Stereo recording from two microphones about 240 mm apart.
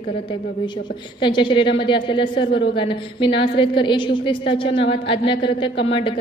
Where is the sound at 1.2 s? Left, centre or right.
Centre.